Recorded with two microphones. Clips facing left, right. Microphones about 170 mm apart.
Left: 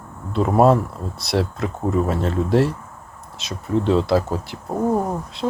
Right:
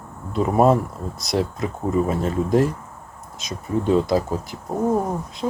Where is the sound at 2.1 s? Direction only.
5° right (ahead or behind).